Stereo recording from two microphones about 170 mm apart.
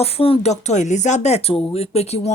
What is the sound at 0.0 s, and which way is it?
Speech, 35° left (ahead or behind).